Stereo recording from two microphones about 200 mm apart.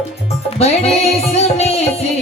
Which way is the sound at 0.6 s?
30° left (ahead or behind).